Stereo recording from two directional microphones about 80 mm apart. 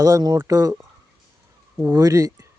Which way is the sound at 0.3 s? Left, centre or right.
Right.